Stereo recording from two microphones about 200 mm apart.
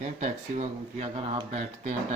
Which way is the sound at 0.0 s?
35° right (ahead or behind).